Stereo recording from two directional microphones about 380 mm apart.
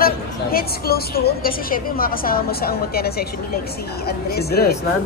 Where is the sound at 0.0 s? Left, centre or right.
Left.